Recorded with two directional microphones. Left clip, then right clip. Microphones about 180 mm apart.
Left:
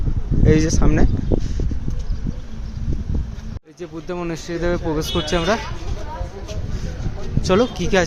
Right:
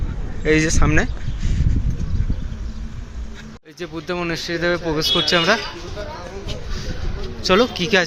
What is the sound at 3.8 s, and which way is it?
Speech, 5° left (ahead or behind).